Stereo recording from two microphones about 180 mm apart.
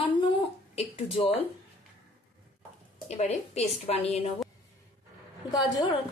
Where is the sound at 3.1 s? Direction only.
40° left (ahead or behind).